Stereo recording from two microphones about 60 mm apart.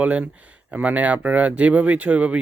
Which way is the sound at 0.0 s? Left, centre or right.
Right.